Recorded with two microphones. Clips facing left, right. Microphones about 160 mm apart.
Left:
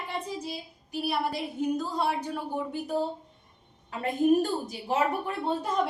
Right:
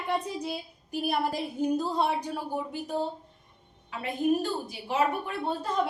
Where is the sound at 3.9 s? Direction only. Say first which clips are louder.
Left 3 dB; 45° left (ahead or behind).